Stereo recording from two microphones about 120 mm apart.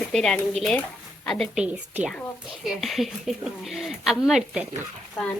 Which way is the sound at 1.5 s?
10° right (ahead or behind).